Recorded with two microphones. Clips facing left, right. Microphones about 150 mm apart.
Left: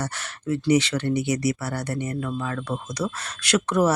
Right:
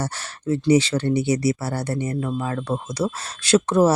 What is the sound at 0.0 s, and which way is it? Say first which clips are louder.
Speech: right 3 dB; 30° right (ahead or behind).